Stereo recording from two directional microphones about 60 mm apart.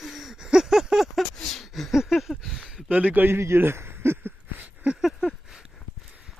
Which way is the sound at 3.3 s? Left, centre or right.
Right.